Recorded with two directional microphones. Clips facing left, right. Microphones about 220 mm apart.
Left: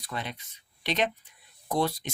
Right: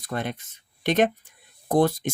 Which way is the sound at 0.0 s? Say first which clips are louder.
Right 7 dB; 50° right (ahead or behind).